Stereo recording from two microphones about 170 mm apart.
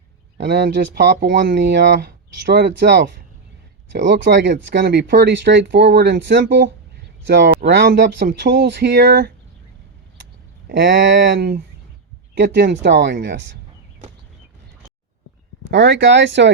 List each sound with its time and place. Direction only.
0.3 s speech: 90° right; by 9.3 s 65° right (ahead or behind)
10.7 s speech: 80° right
12.3 s speech: 75° right (ahead or behind); by 13.3 s 90° right
15.7 s speech: 90° right